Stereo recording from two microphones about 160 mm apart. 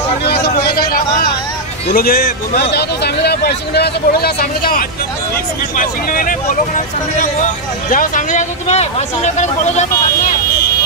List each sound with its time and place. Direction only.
0.2 s a sound: 85° left; by 1.2 s 65° left (ahead or behind)
2.0 s a man's voice: 70° left (ahead or behind)
7.9 s speech: 60° left (ahead or behind)